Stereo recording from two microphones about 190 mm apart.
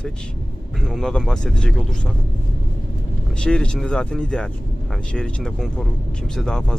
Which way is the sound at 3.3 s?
5° left (ahead or behind).